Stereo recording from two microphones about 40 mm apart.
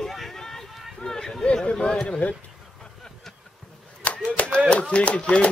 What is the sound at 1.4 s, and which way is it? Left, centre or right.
Speech, left.